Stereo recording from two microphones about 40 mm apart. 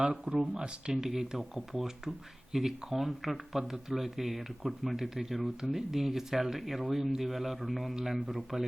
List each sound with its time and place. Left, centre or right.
0.1 s speech: centre